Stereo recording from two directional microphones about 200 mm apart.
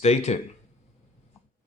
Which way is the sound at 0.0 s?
35° left (ahead or behind).